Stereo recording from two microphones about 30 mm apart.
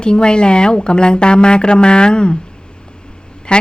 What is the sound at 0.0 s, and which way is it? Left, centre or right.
Speech, left.